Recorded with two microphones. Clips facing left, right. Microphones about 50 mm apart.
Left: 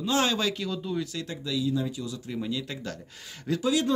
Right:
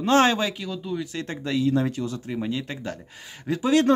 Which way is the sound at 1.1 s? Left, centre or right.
Right.